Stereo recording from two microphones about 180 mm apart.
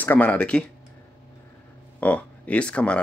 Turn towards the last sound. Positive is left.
turn(degrees=5)  # may be behind; listen again after turning